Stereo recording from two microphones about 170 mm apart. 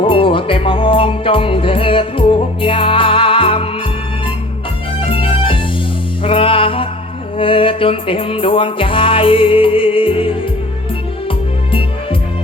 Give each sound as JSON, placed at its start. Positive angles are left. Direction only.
{"t": 0.0, "sound": "music", "side_deg": 30}
{"t": 4.9, "sound": "organ", "side_deg": 30}
{"t": 6.2, "sound": "music", "side_deg": 30}